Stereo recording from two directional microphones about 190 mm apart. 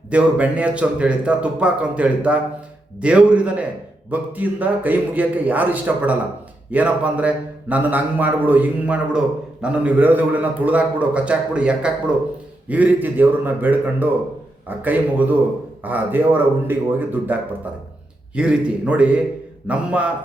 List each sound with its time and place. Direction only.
0.1 s speech: 5° right (ahead or behind)